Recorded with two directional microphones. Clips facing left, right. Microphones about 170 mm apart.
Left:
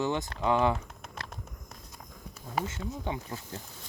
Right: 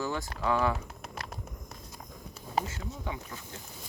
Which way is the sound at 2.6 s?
25° left (ahead or behind).